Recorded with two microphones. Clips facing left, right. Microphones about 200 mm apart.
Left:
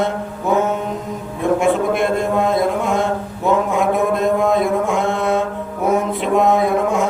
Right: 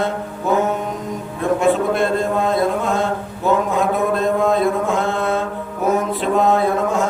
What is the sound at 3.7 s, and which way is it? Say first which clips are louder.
Mantra: left 1 dB; 15° left (ahead or behind).